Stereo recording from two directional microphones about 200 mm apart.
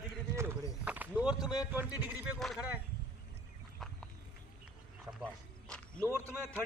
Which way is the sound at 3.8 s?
Centre (ahead or behind).